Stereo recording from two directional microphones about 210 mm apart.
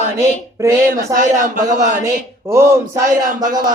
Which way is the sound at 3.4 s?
20° right (ahead or behind).